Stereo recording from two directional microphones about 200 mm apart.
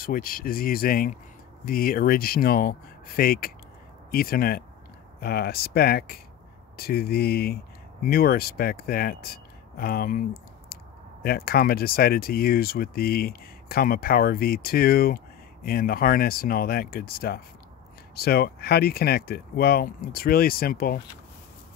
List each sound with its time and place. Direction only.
0.0 s speech: 45° left (ahead or behind)